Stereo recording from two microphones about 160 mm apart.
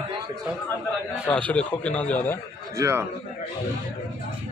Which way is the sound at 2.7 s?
20° right (ahead or behind).